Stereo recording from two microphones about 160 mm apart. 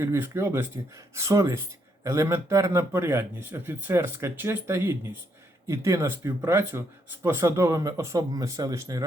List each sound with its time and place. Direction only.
0.0 s speech: 15° right (ahead or behind)